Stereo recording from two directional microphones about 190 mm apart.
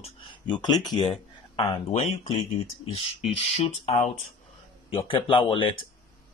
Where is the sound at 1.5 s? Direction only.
30° left (ahead or behind).